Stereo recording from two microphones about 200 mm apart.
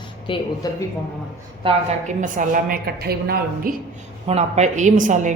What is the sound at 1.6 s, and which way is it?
A woman's voice, 40° right (ahead or behind).